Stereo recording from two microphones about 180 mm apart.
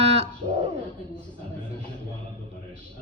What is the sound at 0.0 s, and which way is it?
Bird, 35° right (ahead or behind).